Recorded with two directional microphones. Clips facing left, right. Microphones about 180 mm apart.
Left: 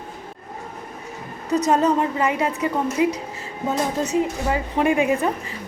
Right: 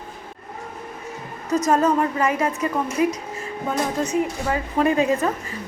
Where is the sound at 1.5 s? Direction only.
20° left (ahead or behind).